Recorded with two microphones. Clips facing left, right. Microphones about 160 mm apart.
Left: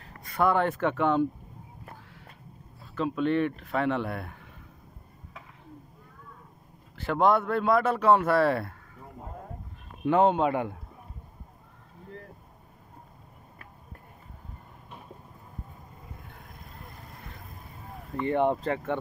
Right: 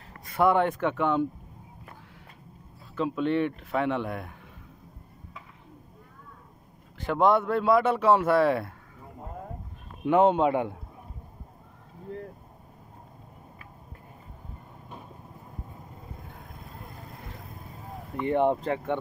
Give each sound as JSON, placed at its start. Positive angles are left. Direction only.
{"t": 0.2, "sound": "speech", "side_deg": -25}
{"t": 0.7, "sound": "speech", "side_deg": -5}
{"t": 3.0, "sound": "a man's voice", "side_deg": -20}
{"t": 7.1, "sound": "a man's voice", "side_deg": -20}
{"t": 10.0, "sound": "a man's voice", "side_deg": -20}
{"t": 18.1, "sound": "a man's voice", "side_deg": -20}